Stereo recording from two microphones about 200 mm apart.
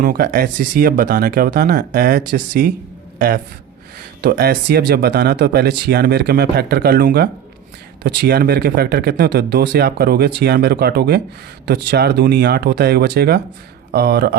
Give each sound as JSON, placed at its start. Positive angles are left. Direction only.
{"t": 0.0, "sound": "speech", "side_deg": -45}